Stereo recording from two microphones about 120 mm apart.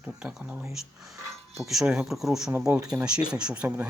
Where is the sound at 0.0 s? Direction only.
5° right (ahead or behind).